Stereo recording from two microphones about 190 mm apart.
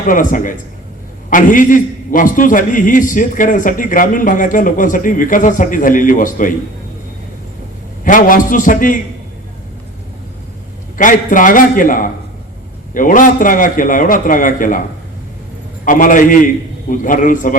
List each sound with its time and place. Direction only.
0.1 s a man's voice: 45° left (ahead or behind)
8.0 s a man's voice: 45° left (ahead or behind)
10.9 s a man's voice: 45° left (ahead or behind)